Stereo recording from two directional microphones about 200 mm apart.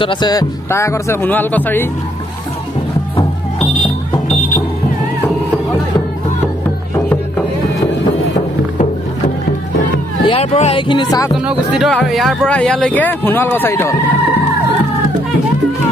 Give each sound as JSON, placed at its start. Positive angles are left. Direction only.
{"t": 0.0, "sound": "speech", "side_deg": 25}
{"t": 10.2, "sound": "speech", "side_deg": 30}
{"t": 11.3, "sound": "speech", "side_deg": -5}